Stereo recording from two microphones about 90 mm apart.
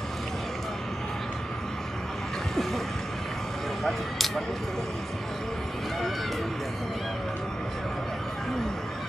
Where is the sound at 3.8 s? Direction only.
5° left (ahead or behind).